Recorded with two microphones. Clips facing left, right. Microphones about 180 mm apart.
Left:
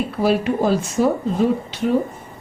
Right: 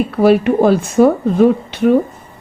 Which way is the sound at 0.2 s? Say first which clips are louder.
Right 8 dB; 60° right (ahead or behind).